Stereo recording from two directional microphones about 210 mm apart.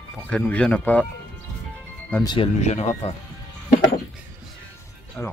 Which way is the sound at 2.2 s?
25° left (ahead or behind).